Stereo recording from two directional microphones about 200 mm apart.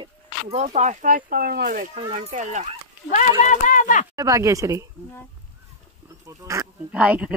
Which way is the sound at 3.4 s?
40° left (ahead or behind).